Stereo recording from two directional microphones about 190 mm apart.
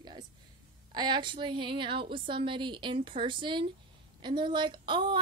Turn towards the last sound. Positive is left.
turn(degrees=-25)  # may be behind; listen again after turning